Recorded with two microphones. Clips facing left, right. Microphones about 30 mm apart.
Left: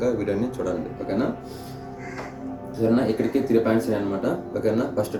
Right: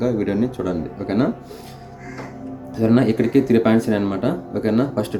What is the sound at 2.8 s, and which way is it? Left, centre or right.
Speech, right.